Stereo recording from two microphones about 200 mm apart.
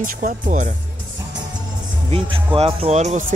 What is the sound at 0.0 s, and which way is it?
Speech, 40° right (ahead or behind).